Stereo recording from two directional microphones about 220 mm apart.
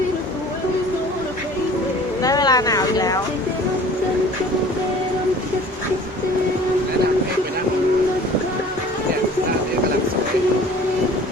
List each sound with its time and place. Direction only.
2.2 s vehicle: 15° left (ahead or behind)